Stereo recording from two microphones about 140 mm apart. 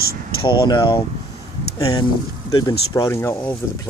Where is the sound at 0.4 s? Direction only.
35° left (ahead or behind).